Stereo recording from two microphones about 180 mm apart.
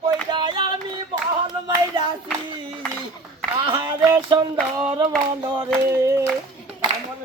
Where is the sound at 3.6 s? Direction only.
25° right (ahead or behind).